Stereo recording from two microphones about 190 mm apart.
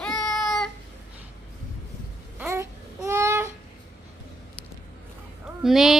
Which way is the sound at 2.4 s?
15° right (ahead or behind).